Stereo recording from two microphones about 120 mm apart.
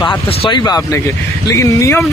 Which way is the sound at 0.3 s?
45° left (ahead or behind).